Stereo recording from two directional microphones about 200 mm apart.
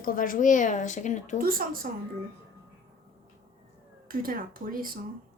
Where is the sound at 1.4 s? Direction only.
45° right (ahead or behind).